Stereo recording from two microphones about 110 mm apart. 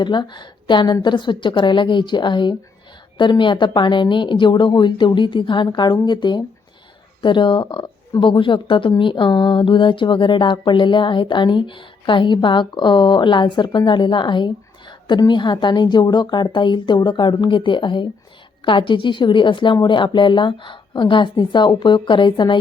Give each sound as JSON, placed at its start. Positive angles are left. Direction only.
{"t": 0.0, "sound": "speech", "side_deg": 45}